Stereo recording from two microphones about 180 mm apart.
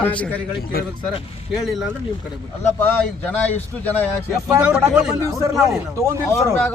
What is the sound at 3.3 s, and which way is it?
Speech, 10° left (ahead or behind).